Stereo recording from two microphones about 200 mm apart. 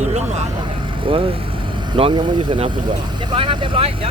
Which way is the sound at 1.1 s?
25° right (ahead or behind).